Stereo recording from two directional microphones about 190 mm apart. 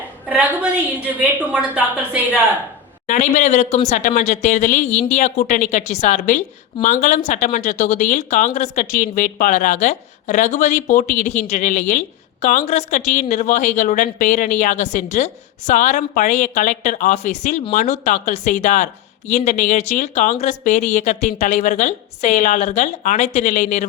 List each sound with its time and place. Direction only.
0.3 s a woman's voice: 5° right (ahead or behind)
3.1 s speech: 40° left (ahead or behind)